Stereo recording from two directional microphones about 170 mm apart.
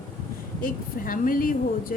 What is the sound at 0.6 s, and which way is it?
Speech, 55° left (ahead or behind).